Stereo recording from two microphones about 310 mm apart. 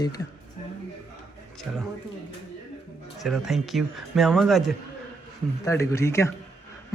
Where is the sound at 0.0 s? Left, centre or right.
Centre.